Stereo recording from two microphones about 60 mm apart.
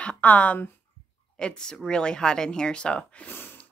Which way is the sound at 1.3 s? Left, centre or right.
Centre.